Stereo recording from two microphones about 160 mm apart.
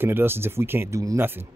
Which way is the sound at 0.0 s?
15° right (ahead or behind).